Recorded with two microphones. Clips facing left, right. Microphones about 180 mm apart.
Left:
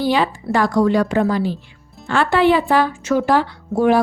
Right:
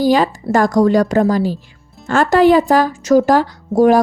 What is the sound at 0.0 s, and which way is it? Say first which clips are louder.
A woman's voice: right 4 dB; 45° right (ahead or behind).